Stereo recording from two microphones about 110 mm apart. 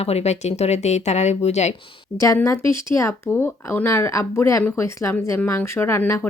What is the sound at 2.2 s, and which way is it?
Speech, 30° left (ahead or behind).